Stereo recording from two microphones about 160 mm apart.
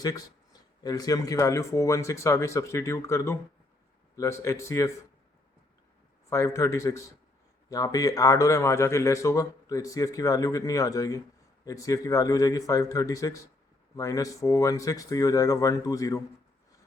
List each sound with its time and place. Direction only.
0.0 s speech: 25° left (ahead or behind)
6.3 s speech: 20° left (ahead or behind)